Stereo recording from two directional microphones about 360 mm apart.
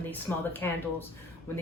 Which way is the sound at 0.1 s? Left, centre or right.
Centre.